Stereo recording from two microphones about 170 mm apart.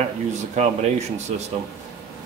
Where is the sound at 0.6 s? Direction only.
40° right (ahead or behind).